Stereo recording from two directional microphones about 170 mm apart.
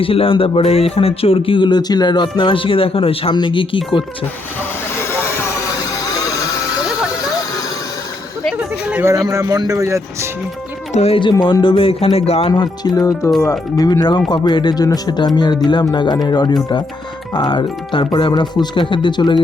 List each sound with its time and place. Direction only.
0.0 s speech: 35° left (ahead or behind)
4.9 s vehicle: 15° left (ahead or behind)
8.5 s speech: 10° right (ahead or behind)
10.9 s speech: 35° left (ahead or behind)